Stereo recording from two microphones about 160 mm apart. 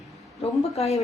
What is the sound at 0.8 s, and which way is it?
Speech, 40° left (ahead or behind).